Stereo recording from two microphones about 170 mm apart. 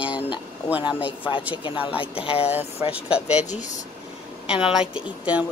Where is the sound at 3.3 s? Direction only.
45° left (ahead or behind).